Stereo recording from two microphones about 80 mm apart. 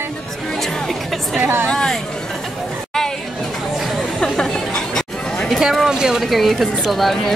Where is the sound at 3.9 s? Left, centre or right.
Centre.